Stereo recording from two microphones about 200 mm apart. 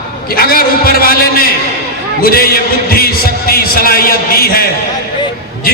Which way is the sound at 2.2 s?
50° left (ahead or behind).